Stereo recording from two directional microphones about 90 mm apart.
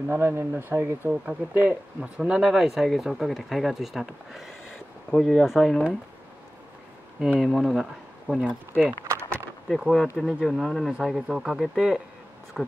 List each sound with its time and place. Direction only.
0.1 s speech: 25° right (ahead or behind); by 5.9 s centre (ahead or behind)
7.2 s speech: 10° right (ahead or behind)
9.8 s speech: centre (ahead or behind)